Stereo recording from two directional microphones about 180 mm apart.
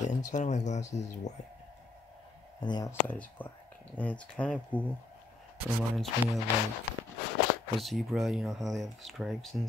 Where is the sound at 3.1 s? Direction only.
10° left (ahead or behind).